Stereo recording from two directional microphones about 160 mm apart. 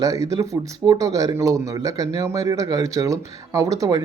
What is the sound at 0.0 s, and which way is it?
Speech, 20° right (ahead or behind).